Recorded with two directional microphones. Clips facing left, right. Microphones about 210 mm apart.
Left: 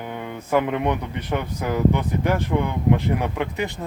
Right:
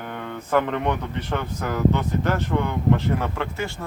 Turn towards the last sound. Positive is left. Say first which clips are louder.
# left 3 dB
turn(degrees=20)  # may be behind; listen again after turning